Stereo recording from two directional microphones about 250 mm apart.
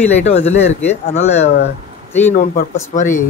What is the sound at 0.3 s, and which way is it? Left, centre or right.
Speech, left.